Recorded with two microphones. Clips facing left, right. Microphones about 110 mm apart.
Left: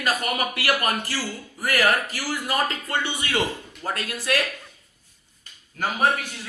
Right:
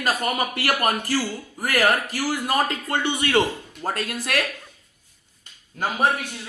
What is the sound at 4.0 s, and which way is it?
Speech, 50° right (ahead or behind).